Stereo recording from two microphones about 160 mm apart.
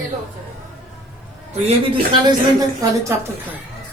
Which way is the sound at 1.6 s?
30° right (ahead or behind).